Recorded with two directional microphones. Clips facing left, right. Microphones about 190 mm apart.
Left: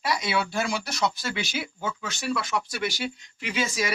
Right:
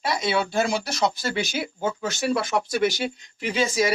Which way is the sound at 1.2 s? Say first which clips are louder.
Right 4 dB; 40° right (ahead or behind).